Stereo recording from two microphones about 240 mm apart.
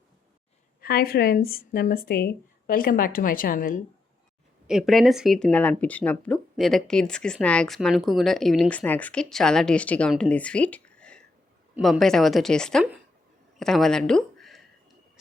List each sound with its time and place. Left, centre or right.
0.8 s a woman's voice: left
4.6 s speech: centre